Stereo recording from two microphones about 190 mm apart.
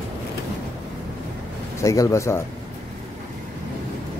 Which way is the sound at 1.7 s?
15° left (ahead or behind).